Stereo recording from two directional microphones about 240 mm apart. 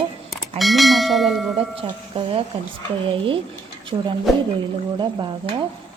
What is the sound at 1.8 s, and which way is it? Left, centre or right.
Speech, right.